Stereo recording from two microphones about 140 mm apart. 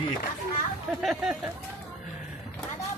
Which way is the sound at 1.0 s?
5° right (ahead or behind).